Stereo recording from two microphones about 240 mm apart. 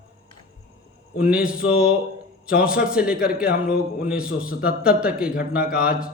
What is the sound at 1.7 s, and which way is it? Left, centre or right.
Speech, left.